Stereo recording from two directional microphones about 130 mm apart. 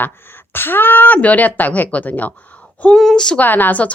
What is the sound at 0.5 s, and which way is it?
A woman's voice, 15° left (ahead or behind).